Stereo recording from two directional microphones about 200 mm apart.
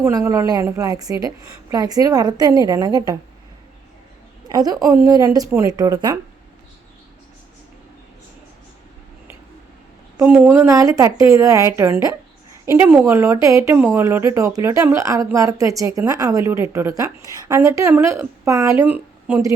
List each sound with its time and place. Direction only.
0.3 s speech: 15° right (ahead or behind)
4.4 s a woman's voice: 20° right (ahead or behind)
10.2 s speech: 10° right (ahead or behind)